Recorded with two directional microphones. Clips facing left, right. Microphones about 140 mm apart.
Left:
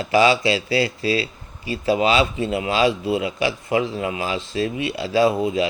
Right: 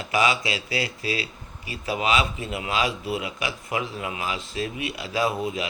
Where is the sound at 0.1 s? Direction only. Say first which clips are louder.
Left 7 dB; 30° left (ahead or behind).